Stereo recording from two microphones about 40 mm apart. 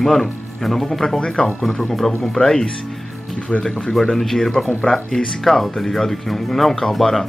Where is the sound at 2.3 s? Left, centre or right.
Centre.